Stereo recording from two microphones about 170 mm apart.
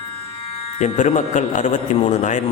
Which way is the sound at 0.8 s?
45° left (ahead or behind).